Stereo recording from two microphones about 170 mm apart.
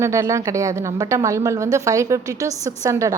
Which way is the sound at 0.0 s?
15° right (ahead or behind).